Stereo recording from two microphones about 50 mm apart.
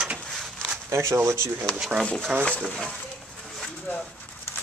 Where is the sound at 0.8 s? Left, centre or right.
Right.